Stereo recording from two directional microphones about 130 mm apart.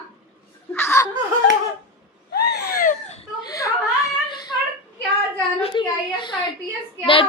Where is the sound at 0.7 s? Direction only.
20° left (ahead or behind).